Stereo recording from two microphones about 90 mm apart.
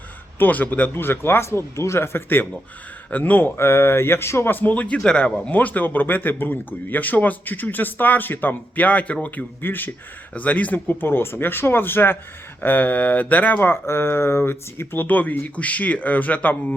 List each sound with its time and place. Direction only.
0.3 s speech: 20° left (ahead or behind)
5.5 s speech: 20° left (ahead or behind)